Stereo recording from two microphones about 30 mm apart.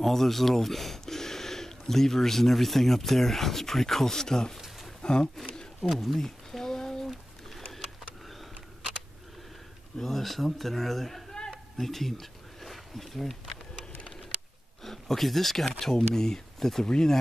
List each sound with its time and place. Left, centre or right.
0.0 s speech: centre
5.0 s speech: left
5.8 s a man's voice: centre
6.1 s a sound: centre
8.3 s a sound: centre
9.9 s a man's voice: centre
14.8 s speech: centre